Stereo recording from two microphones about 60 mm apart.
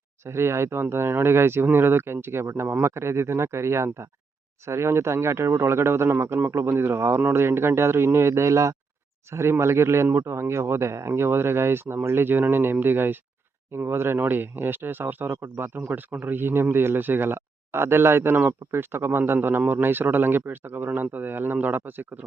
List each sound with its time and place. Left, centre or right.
0.3 s speech: right